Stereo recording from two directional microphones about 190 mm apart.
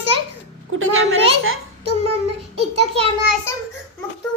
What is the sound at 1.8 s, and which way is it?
Child singing, 30° right (ahead or behind).